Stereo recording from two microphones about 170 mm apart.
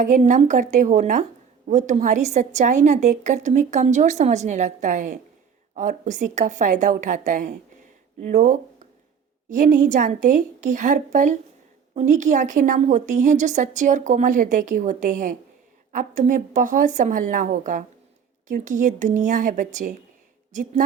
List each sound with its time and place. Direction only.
0.0 s a woman's voice: 45° right (ahead or behind)